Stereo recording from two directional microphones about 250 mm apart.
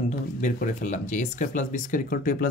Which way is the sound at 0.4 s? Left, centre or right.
Left.